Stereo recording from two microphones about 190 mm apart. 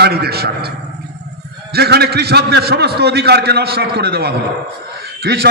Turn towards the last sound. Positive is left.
turn(degrees=-55)  # may be behind; listen again after turning